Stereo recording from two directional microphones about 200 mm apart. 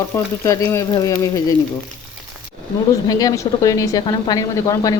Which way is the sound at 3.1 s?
15° left (ahead or behind).